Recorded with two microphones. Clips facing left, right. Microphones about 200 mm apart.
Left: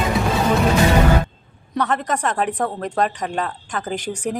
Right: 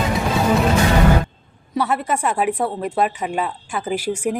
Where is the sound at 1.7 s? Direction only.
10° right (ahead or behind).